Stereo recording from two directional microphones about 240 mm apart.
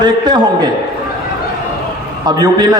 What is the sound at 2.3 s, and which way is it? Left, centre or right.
Speech, centre.